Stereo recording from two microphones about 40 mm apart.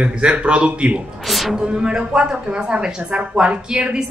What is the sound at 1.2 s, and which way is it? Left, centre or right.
Speech, centre.